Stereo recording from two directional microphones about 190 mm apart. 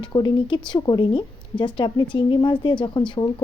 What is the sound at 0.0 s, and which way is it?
A woman's voice, 25° left (ahead or behind).